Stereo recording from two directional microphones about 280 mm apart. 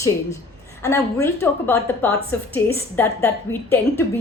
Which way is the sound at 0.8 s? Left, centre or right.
Centre.